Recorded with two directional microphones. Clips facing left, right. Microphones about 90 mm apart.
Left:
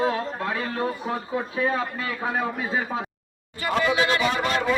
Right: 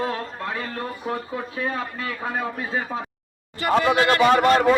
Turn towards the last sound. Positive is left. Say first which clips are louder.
# right 7 dB
turn(degrees=-50)  # may be behind; listen again after turning